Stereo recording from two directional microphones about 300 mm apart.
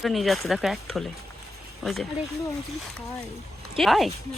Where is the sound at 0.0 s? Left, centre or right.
Centre.